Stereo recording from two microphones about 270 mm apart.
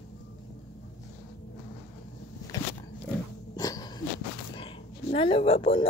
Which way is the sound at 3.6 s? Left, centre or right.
Centre.